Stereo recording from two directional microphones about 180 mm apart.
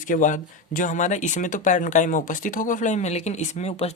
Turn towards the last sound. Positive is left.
turn(degrees=35)  # may be behind; listen again after turning